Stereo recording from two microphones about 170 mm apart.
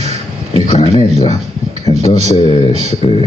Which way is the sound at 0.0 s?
40° right (ahead or behind).